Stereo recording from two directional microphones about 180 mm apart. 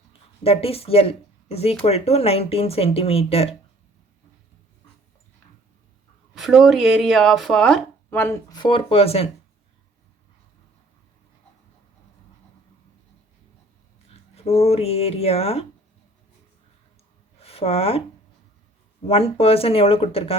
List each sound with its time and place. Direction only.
0.4 s speech: 35° left (ahead or behind)
6.3 s speech: centre (ahead or behind); by 9.3 s 35° left (ahead or behind)
14.3 s speech: 35° left (ahead or behind)
17.4 s speech: 35° left (ahead or behind)
19.0 s speech: 35° left (ahead or behind)